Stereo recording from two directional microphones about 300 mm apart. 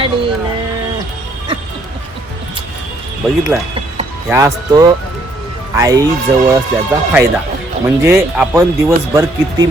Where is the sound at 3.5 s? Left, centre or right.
Centre.